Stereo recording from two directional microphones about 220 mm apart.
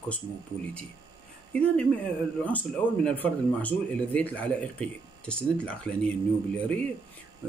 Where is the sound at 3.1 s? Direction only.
5° left (ahead or behind).